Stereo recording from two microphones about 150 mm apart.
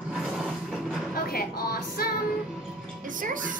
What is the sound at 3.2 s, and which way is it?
Speech, 60° right (ahead or behind).